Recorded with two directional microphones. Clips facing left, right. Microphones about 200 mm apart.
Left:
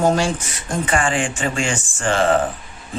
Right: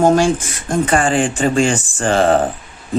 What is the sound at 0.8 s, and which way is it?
Speech, 40° right (ahead or behind).